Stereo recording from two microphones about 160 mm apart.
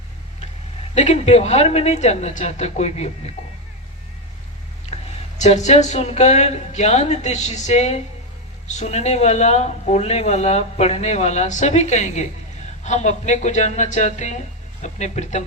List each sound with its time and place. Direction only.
0.9 s speech: 45° left (ahead or behind)
5.4 s speech: 45° left (ahead or behind)